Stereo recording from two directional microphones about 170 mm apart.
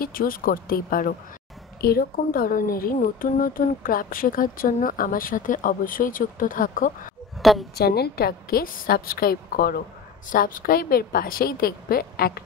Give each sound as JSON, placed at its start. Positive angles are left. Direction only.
{"t": 0.0, "sound": "speech", "side_deg": 60}
{"t": 7.7, "sound": "speech", "side_deg": 70}